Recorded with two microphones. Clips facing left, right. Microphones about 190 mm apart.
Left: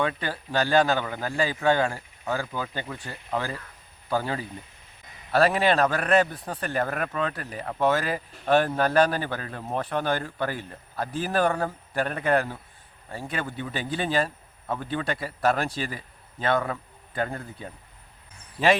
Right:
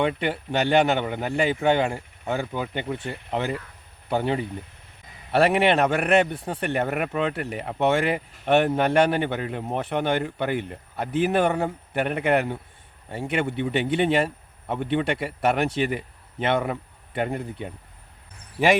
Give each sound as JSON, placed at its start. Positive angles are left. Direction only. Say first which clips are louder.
{"t": 0.0, "sound": "a man's voice", "louder": "right 4 dB", "side_deg": -25}